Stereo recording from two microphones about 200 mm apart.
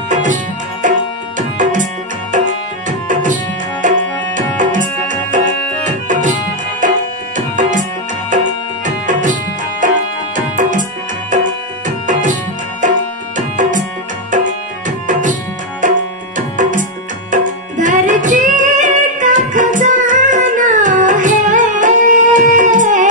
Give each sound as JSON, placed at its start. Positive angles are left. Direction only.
{"t": 0.1, "sound": "music", "side_deg": -40}
{"t": 1.6, "sound": "tabla", "side_deg": -40}
{"t": 2.3, "sound": "music", "side_deg": -40}
{"t": 7.3, "sound": "tabla", "side_deg": -40}
{"t": 8.3, "sound": "music", "side_deg": -40}
{"t": 13.6, "sound": "music", "side_deg": -40}
{"t": 15.8, "sound": "music", "side_deg": -40}
{"t": 16.3, "sound": "tabla", "side_deg": -40}
{"t": 17.3, "sound": "music", "side_deg": -40}